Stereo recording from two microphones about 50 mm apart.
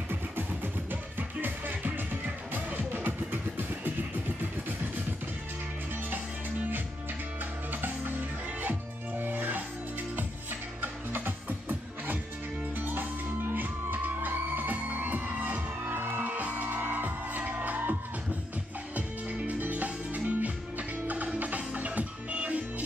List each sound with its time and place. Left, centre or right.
0.1 s music: right
7.7 s music: right
10.8 s music: right
12.7 s music: right
18.9 s music: right